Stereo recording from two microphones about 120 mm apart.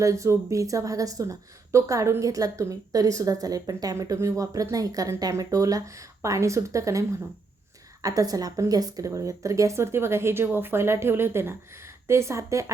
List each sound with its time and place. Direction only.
0.0 s speech: 25° right (ahead or behind)
8.0 s speech: 30° right (ahead or behind)